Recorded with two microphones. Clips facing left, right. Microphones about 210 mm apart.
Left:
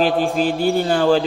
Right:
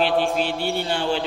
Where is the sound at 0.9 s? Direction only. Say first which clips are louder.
Left 9 dB; 90° left.